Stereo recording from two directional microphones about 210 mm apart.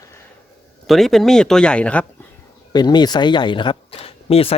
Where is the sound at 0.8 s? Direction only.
Centre (ahead or behind).